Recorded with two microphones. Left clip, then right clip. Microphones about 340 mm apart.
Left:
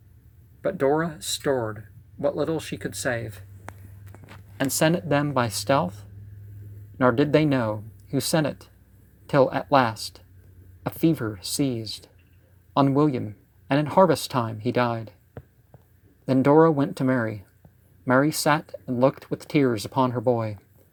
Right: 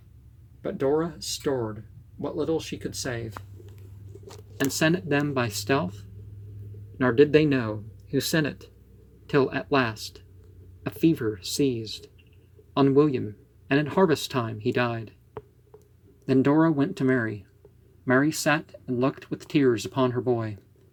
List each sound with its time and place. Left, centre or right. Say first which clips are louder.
0.6 s speech: left 3 dB; left
4.6 s speech: left 2 dB; centre
16.2 s speech: left 4 dB; centre